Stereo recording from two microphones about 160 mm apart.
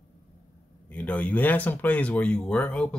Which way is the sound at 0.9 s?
10° left (ahead or behind).